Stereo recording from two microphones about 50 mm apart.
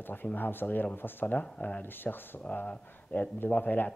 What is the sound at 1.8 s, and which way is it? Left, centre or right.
Speech, left.